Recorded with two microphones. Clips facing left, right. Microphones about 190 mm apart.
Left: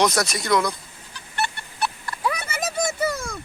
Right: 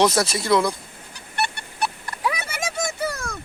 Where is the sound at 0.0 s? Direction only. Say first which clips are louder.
Right 2 dB; 30° right (ahead or behind).